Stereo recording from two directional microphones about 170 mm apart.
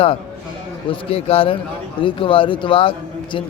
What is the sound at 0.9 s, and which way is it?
A man's voice, 35° left (ahead or behind).